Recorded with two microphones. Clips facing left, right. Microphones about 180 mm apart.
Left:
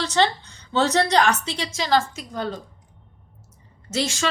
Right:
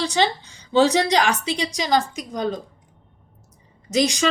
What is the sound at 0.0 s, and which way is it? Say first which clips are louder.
A woman's voice: even; 15° right (ahead or behind).